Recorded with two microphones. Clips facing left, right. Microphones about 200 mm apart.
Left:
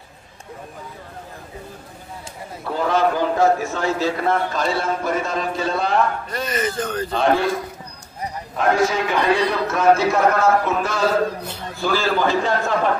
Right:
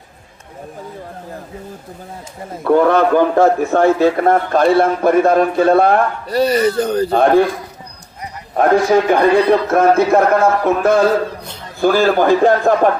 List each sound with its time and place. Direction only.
2.5 s a man's voice: 60° right (ahead or behind)
6.2 s a man's voice: 35° right (ahead or behind)
7.1 s a man's voice: 55° right (ahead or behind)
8.5 s a man's voice: 50° right (ahead or behind)